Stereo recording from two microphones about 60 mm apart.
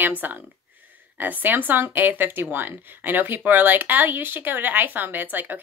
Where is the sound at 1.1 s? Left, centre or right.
Right.